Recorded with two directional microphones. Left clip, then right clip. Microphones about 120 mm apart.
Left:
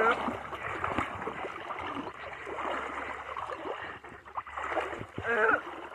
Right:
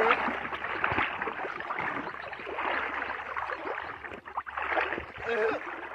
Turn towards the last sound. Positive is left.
turn(degrees=45)  # may be behind; listen again after turning